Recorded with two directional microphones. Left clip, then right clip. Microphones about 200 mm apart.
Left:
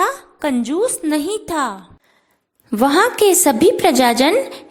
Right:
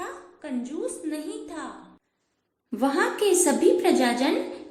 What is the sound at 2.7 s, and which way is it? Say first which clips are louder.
A woman's voice: left 10 dB; 45° left (ahead or behind).